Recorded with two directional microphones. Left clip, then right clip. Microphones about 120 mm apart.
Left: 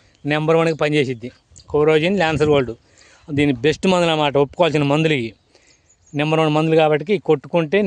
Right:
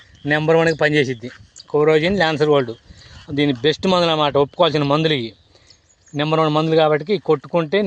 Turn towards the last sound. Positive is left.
turn(degrees=30)  # may be behind; listen again after turning